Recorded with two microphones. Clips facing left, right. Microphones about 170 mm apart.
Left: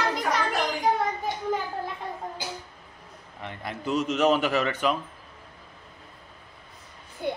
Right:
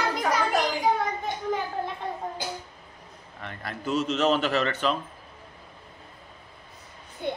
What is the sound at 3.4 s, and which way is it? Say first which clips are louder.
A man's voice: left 1 dB; 20° left (ahead or behind).